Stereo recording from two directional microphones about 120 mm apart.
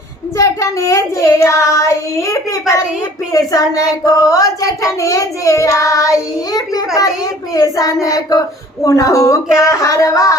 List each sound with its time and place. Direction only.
0.3 s child singing: 25° left (ahead or behind)